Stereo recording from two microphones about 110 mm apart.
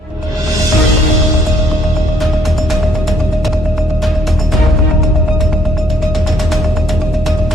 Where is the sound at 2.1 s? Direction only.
Centre (ahead or behind).